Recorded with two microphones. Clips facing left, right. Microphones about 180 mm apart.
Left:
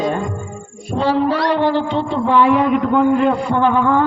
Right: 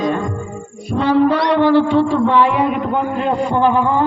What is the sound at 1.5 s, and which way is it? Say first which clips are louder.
Speech: right 4 dB; 15° left (ahead or behind).